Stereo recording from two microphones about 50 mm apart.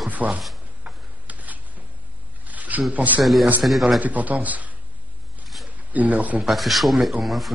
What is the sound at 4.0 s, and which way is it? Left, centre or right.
Speech, right.